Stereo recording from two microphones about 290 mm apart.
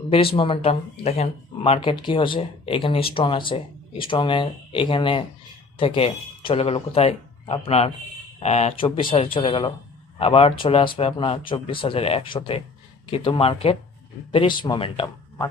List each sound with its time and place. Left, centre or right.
0.1 s speech: centre